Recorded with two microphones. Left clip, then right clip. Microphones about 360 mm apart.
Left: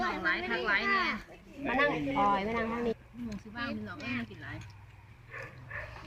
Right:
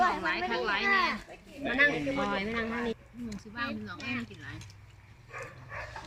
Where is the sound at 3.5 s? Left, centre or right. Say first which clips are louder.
Right 2 dB; centre.